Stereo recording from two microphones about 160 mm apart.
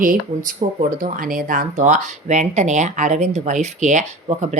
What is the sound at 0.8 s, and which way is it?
Speech, 55° right (ahead or behind).